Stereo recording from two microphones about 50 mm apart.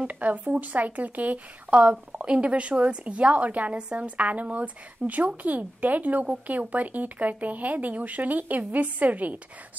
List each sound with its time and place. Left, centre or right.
0.0 s speech: right